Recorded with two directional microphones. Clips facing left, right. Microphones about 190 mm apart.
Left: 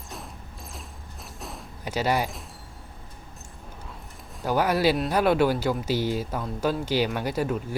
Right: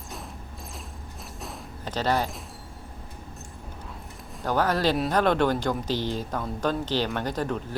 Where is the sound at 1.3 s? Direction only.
Centre (ahead or behind).